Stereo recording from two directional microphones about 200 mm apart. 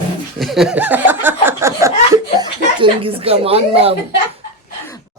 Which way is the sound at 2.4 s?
25° right (ahead or behind).